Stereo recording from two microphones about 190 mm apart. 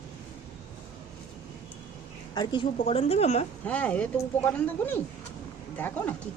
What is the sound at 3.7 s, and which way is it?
Speech, 5° left (ahead or behind).